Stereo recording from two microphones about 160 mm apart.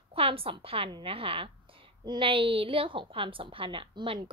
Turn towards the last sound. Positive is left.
turn(degrees=-30)  # may be behind; listen again after turning